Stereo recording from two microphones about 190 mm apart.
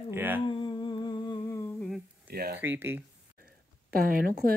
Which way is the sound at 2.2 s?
55° right (ahead or behind).